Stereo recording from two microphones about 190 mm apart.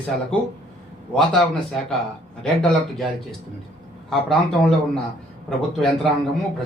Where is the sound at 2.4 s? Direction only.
5° left (ahead or behind).